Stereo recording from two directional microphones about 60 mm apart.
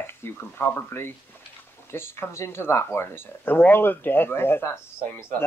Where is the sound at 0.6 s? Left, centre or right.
Left.